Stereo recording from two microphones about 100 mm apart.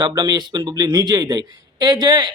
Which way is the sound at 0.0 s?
45° right (ahead or behind).